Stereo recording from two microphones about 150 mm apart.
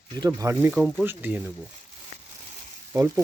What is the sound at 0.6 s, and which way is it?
Speech, 5° right (ahead or behind).